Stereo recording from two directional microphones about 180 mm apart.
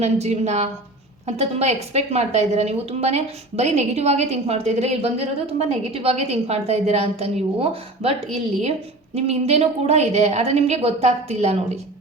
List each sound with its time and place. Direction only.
0.0 s a woman's voice: 40° right (ahead or behind)